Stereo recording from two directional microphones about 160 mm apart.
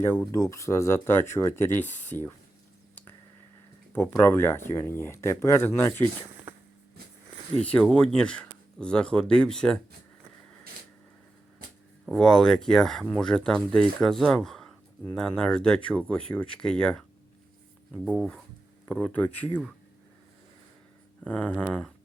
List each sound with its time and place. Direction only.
0.0 s speech: 15° left (ahead or behind)
4.2 s speech: 15° left (ahead or behind)
7.6 s speech: 5° left (ahead or behind)
12.0 s speech: 5° left (ahead or behind)
18.9 s speech: 10° left (ahead or behind)
21.2 s speech: 10° left (ahead or behind)